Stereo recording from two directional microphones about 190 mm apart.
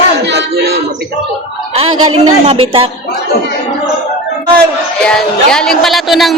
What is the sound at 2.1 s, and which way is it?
Speech, 30° right (ahead or behind).